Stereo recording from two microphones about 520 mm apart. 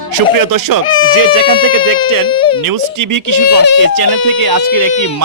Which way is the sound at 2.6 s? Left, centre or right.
Right.